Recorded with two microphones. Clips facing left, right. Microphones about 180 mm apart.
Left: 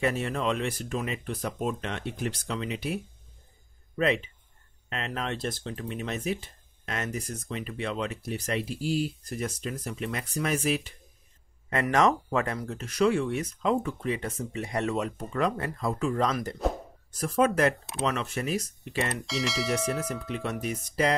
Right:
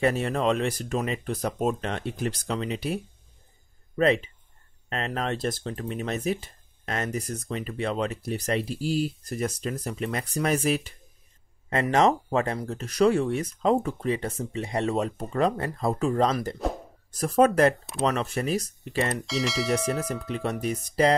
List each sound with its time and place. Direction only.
0.0 s speech: 40° right (ahead or behind)
4.8 s speech: 40° right (ahead or behind)
11.7 s speech: 25° right (ahead or behind)
19.2 s speech: centre (ahead or behind)
20.6 s speech: 35° right (ahead or behind)